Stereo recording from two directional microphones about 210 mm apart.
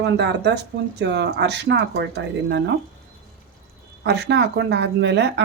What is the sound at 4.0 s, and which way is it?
Speech, 55° right (ahead or behind).